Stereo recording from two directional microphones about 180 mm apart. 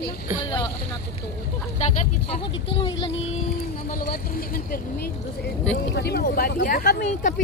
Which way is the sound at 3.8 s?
50° left (ahead or behind).